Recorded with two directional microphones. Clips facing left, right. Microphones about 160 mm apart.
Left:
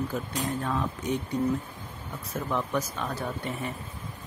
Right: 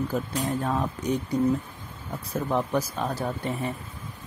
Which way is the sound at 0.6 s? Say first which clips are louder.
Right 3 dB; 35° right (ahead or behind).